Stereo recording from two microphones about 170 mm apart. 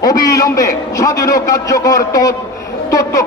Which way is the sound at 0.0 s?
20° left (ahead or behind).